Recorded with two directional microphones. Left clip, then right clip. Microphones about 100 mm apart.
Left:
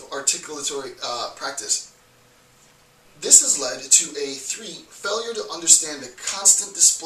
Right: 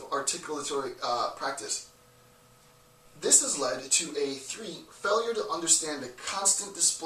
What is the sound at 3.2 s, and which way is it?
Speech, 5° right (ahead or behind).